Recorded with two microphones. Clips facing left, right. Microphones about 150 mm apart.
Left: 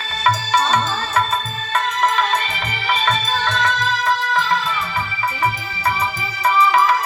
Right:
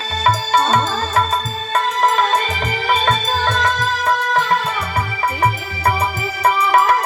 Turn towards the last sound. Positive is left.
turn(degrees=-60)  # may be behind; listen again after turning